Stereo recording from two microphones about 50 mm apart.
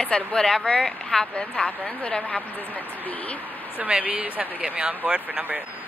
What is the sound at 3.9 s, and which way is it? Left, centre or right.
Speech, right.